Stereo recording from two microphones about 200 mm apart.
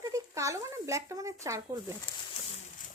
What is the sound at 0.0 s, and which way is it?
Speech, 15° right (ahead or behind).